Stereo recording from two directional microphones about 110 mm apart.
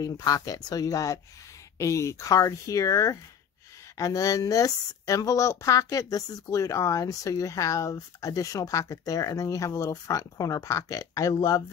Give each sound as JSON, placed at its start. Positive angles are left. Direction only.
{"t": 0.0, "sound": "a woman's voice", "side_deg": 35}